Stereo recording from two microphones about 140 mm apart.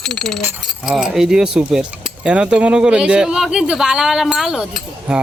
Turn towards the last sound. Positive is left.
turn(degrees=-5)  # may be behind; listen again after turning